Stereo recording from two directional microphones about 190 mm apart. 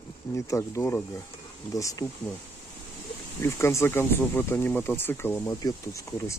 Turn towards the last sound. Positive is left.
turn(degrees=15)  # may be behind; listen again after turning